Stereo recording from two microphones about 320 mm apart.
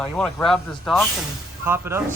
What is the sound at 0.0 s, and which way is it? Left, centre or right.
Speech, centre.